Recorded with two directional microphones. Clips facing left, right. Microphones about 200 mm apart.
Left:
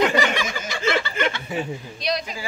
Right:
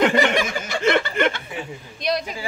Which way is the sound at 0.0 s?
50° right (ahead or behind).